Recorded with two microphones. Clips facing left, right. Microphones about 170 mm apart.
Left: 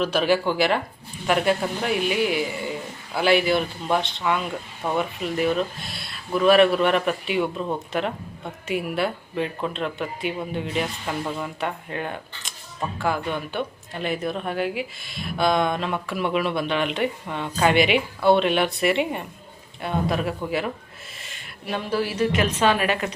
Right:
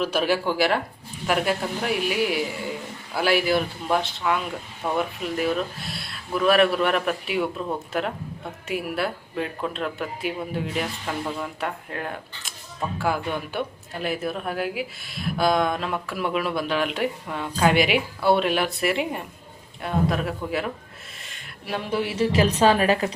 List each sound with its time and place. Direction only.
0.0 s speech: 5° right (ahead or behind)
21.2 s a sound: centre (ahead or behind)
21.8 s a woman's voice: 20° right (ahead or behind)